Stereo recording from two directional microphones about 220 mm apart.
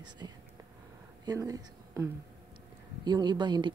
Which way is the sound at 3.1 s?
20° right (ahead or behind).